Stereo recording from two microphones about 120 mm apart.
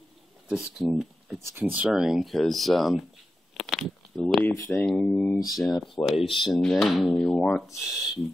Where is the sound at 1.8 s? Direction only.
5° right (ahead or behind).